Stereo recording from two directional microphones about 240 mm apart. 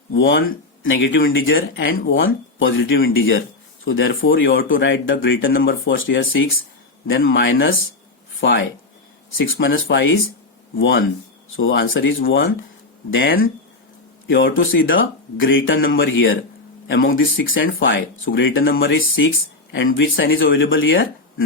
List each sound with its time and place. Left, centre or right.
0.1 s speech: left
18.7 s speech: left
18.9 s speech: left